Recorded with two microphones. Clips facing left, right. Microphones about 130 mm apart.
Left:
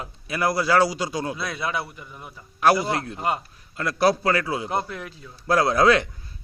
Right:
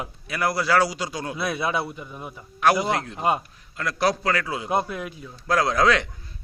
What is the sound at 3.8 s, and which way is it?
Speech, 30° left (ahead or behind).